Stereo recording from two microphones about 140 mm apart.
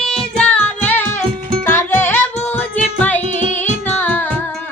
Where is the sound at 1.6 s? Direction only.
15° left (ahead or behind).